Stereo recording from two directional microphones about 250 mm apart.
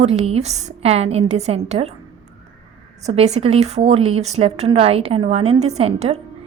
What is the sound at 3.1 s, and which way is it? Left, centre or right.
Speech, right.